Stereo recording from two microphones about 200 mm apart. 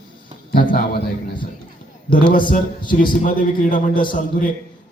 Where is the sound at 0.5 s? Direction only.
50° left (ahead or behind).